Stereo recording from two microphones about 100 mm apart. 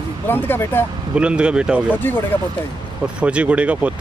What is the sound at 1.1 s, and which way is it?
Speech, 10° right (ahead or behind).